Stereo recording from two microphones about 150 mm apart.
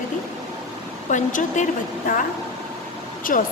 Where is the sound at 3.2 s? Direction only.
65° left (ahead or behind).